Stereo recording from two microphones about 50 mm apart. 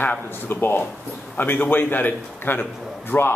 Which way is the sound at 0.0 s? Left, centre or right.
Left.